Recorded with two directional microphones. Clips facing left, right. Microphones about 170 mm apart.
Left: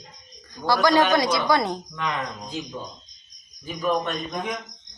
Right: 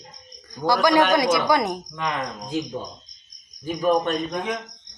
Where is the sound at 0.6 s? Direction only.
20° right (ahead or behind).